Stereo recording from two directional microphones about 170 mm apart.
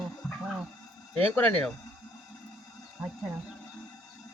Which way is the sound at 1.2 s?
10° left (ahead or behind).